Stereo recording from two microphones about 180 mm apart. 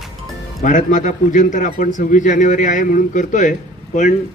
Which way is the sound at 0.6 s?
45° left (ahead or behind).